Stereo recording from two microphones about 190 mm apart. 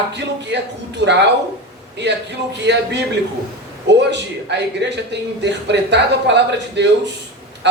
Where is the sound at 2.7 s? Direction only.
65° right (ahead or behind).